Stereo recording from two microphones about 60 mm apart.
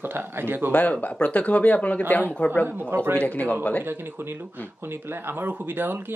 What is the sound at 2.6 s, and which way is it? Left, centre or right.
Speech, right.